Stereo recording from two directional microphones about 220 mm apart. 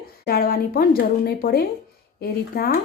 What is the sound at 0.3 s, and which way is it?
A woman's voice, 45° left (ahead or behind).